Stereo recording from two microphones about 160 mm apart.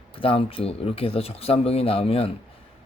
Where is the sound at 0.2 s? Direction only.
35° left (ahead or behind).